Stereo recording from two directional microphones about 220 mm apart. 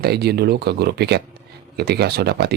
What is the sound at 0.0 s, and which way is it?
Speech, 45° right (ahead or behind).